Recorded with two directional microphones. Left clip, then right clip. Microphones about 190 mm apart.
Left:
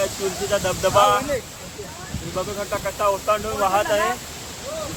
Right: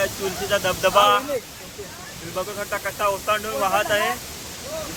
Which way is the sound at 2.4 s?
Centre (ahead or behind).